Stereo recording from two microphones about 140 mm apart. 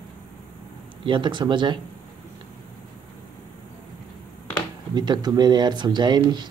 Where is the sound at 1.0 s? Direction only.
35° right (ahead or behind).